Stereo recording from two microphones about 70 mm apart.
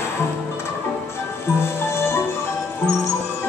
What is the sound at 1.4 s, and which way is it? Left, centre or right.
Music, left.